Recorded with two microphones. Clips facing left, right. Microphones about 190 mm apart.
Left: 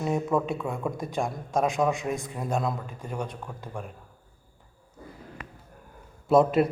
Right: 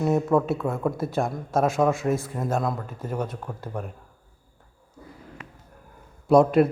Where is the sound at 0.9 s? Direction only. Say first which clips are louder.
Right 4 dB; 15° left (ahead or behind).